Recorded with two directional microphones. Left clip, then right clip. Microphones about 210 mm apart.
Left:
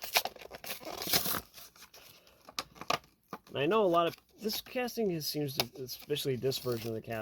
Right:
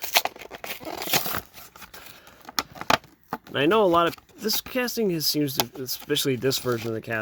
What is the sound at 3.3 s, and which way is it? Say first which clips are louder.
Speech: right 9 dB; 30° right (ahead or behind).